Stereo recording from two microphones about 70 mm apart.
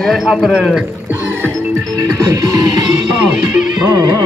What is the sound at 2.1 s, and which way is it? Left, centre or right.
Music, right.